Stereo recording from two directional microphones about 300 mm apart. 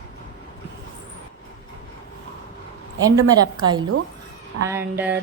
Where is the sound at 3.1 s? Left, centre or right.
Centre.